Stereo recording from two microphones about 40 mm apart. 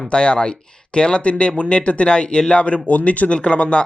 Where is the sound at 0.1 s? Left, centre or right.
Left.